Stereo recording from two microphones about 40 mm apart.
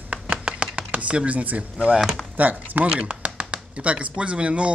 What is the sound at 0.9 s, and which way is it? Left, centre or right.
Speech, right.